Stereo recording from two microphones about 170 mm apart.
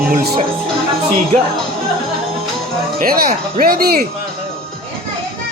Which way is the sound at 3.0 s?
60° right (ahead or behind).